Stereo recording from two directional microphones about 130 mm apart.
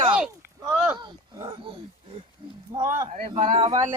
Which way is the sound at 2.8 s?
20° right (ahead or behind).